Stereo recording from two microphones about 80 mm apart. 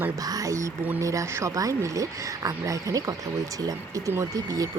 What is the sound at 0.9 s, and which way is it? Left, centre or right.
Speech, right.